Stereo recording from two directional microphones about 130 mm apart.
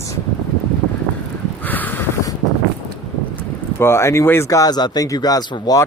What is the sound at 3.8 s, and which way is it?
Speech, 20° left (ahead or behind).